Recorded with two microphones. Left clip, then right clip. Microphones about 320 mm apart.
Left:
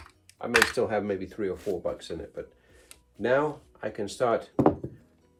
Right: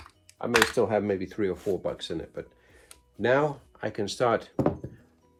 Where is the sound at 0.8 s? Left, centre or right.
Right.